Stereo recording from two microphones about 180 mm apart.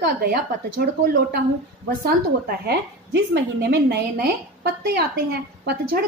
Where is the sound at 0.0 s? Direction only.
60° right (ahead or behind).